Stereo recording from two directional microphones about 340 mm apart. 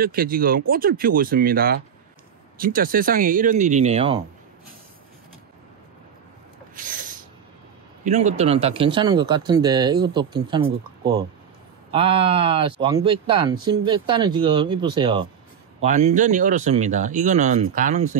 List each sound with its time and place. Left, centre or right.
0.0 s speech: right
6.7 s snort: right
8.0 s speech: right